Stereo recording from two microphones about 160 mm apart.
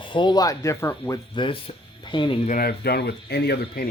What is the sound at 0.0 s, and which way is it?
Speech, 30° left (ahead or behind).